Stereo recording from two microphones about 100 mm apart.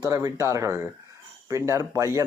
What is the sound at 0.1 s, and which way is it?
Speech, 35° right (ahead or behind).